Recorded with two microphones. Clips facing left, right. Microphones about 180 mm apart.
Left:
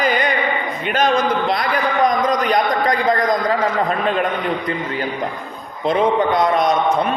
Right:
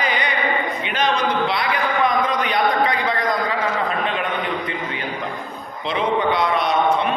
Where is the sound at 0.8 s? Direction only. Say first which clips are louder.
Left 7 dB; 45° left (ahead or behind).